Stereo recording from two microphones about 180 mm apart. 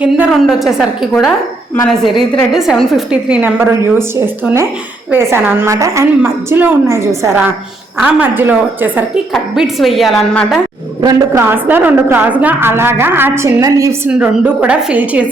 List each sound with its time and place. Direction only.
0.0 s a woman's voice: 5° right (ahead or behind)
2.5 s a woman's voice: centre (ahead or behind)
11.0 s a woman's voice: 15° right (ahead or behind)
14.1 s a woman's voice: 5° right (ahead or behind)